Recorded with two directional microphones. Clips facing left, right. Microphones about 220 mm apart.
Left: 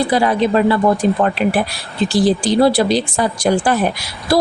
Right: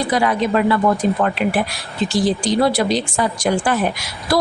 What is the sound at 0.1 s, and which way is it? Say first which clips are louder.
Speech: left 3 dB; 30° left (ahead or behind).